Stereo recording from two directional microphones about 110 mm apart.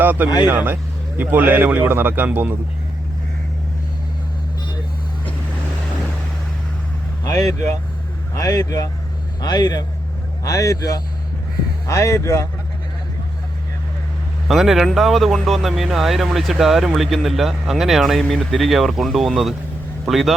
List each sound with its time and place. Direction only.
0.0 s speech: 15° right (ahead or behind)
8.4 s speech: 35° left (ahead or behind)
14.4 s speech: centre (ahead or behind)